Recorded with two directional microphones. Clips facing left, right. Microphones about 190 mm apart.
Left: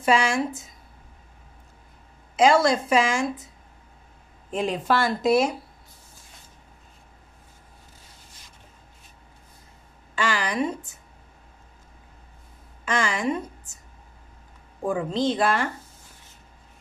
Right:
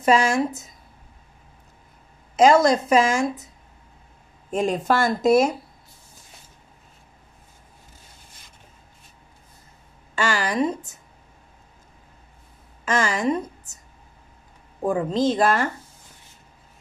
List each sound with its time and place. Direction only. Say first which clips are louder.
0.0 s speech: right 3 dB; 40° right (ahead or behind)
2.3 s a woman's voice: right 3 dB; 40° right (ahead or behind)
4.5 s a woman's voice: right 3 dB; 45° right (ahead or behind)
10.1 s a woman's voice: right 3 dB; 45° right (ahead or behind)
12.8 s a woman's voice: right 3 dB; 45° right (ahead or behind)
14.9 s a woman's voice: right 3 dB; 40° right (ahead or behind)